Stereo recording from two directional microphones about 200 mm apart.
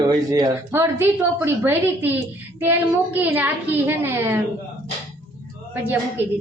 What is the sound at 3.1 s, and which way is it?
A woman's voice, 10° right (ahead or behind).